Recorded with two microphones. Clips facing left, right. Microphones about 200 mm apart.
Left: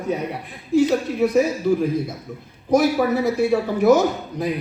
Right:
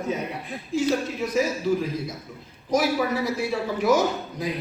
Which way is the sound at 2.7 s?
50° left (ahead or behind).